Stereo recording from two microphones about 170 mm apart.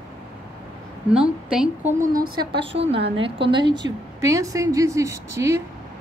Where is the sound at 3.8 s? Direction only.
20° right (ahead or behind).